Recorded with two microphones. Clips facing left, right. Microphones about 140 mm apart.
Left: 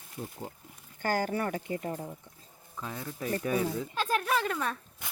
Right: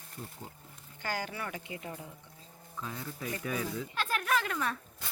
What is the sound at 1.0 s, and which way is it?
Speech, 45° left (ahead or behind).